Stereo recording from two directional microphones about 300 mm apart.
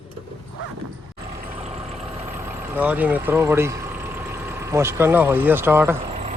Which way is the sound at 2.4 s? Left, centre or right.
Centre.